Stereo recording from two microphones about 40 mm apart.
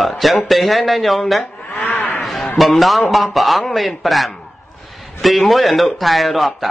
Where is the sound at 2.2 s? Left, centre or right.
Centre.